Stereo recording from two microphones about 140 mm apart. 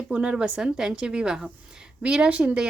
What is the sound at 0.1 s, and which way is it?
A woman's voice, 5° right (ahead or behind).